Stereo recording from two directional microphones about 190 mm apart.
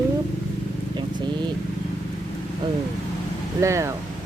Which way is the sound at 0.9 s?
25° right (ahead or behind).